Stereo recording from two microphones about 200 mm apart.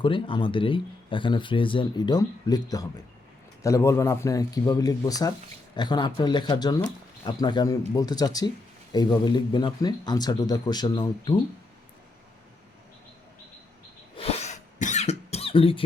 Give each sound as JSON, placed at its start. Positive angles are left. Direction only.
{"t": 0.0, "sound": "a man's voice", "side_deg": 25}
{"t": 14.2, "sound": "cough", "side_deg": 30}